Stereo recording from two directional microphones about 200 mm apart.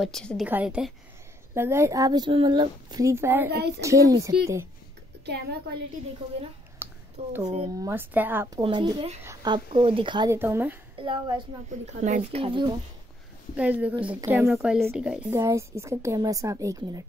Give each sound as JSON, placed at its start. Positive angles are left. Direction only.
{"t": 0.0, "sound": "a woman's voice", "side_deg": 5}
{"t": 3.4, "sound": "a child's voice", "side_deg": -55}
{"t": 3.8, "sound": "a woman's voice", "side_deg": -15}
{"t": 5.2, "sound": "a woman's voice", "side_deg": -55}
{"t": 6.8, "sound": "a sound", "side_deg": -10}
{"t": 7.2, "sound": "a woman's voice", "side_deg": -30}
{"t": 7.7, "sound": "a woman's voice", "side_deg": -15}
{"t": 8.6, "sound": "speech", "side_deg": -25}
{"t": 11.0, "sound": "speech", "side_deg": -25}
{"t": 11.9, "sound": "a woman's voice", "side_deg": -35}
{"t": 13.6, "sound": "a woman's voice", "side_deg": -5}